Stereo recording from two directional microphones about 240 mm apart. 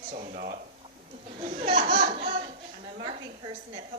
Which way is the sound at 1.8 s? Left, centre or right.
Right.